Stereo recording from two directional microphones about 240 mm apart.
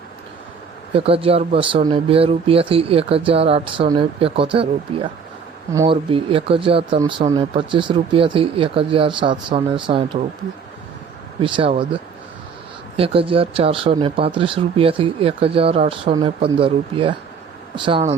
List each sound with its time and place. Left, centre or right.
0.9 s speech: right
5.8 s speech: right
11.4 s speech: right
13.0 s speech: right